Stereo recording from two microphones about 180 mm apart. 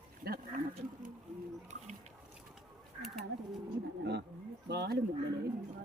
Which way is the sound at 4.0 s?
70° right (ahead or behind).